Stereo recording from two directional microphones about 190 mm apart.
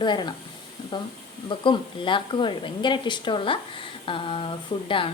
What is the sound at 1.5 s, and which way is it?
Speech, 25° left (ahead or behind).